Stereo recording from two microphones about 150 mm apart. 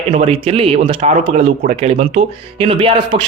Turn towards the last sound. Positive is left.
turn(degrees=-35)  # may be behind; listen again after turning